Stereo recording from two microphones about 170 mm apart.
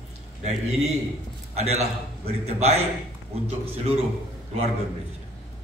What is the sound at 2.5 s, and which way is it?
Speech, 40° right (ahead or behind).